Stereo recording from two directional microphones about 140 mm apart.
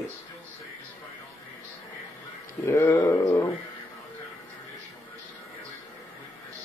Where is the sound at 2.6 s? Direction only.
20° left (ahead or behind).